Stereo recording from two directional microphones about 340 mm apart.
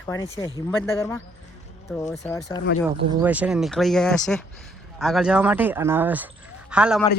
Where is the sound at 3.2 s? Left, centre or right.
Centre.